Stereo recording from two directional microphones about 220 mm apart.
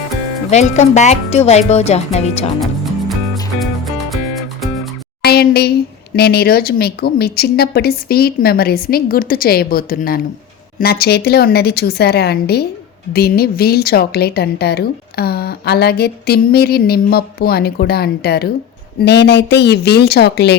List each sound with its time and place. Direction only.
0.5 s speech: 30° left (ahead or behind)
5.2 s a sound: 45° left (ahead or behind)
6.1 s a woman's voice: 45° left (ahead or behind)